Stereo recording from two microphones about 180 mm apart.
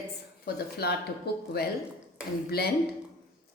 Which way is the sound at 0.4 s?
60° left (ahead or behind).